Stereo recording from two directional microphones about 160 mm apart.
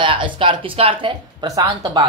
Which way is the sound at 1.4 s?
25° right (ahead or behind).